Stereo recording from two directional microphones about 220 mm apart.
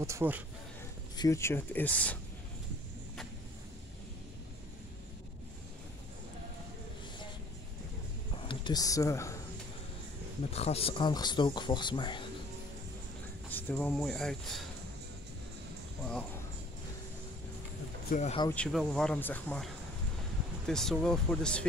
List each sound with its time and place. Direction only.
0.0 s speech: 10° right (ahead or behind)
1.1 s speech: 15° left (ahead or behind)
8.5 s speech: 20° left (ahead or behind)
10.5 s speech: 30° left (ahead or behind)
13.5 s speech: 10° left (ahead or behind)
18.1 s speech: 30° left (ahead or behind)
18.5 s speech: 5° left (ahead or behind)